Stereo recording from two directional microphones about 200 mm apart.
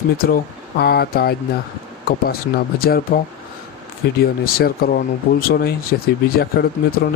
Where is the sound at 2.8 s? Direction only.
50° left (ahead or behind).